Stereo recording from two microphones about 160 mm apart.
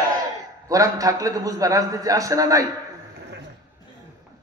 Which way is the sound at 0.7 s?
20° right (ahead or behind).